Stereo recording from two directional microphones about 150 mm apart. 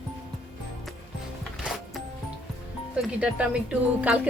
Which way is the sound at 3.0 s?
10° right (ahead or behind).